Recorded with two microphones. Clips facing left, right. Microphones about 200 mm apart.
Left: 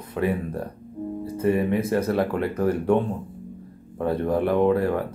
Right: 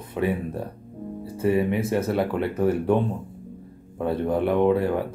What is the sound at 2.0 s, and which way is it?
Speech, centre (ahead or behind).